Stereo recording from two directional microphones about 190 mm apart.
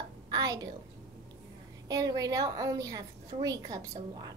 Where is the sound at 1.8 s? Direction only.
20° right (ahead or behind).